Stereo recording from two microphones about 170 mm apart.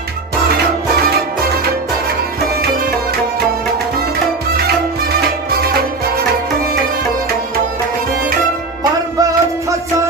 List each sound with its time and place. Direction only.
9.1 s music: 20° right (ahead or behind)